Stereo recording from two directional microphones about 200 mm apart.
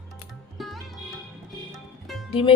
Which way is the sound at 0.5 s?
Centre (ahead or behind).